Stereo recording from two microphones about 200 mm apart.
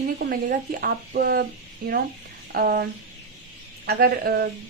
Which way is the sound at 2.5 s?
55° right (ahead or behind).